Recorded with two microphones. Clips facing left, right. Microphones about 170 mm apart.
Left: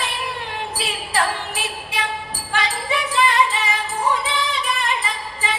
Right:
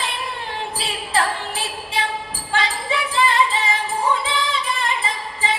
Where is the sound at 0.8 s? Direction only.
25° right (ahead or behind).